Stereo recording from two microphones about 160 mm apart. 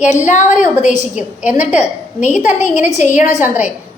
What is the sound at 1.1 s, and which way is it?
Speech, 5° right (ahead or behind).